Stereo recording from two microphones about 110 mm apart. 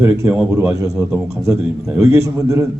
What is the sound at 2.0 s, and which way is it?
Speech, 30° right (ahead or behind).